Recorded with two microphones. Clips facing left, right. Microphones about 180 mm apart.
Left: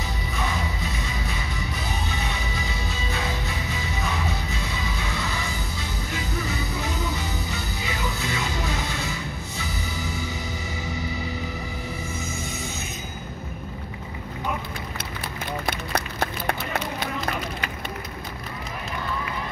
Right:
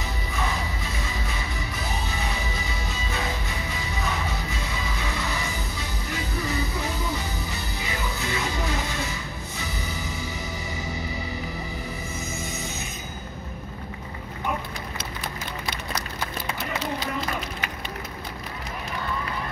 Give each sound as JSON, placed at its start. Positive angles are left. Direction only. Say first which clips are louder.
{"t": 15.6, "sound": "run", "louder": "left 4 dB", "side_deg": 60}